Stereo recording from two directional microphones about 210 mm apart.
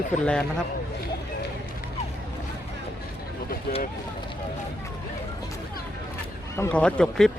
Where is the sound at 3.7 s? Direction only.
45° left (ahead or behind).